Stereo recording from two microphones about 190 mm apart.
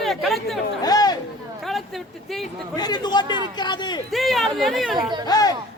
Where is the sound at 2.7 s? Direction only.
20° left (ahead or behind).